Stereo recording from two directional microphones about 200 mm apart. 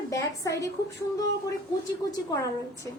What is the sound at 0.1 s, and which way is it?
Speech, 15° left (ahead or behind).